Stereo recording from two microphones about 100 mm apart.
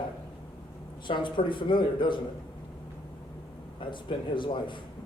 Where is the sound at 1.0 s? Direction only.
55° left (ahead or behind).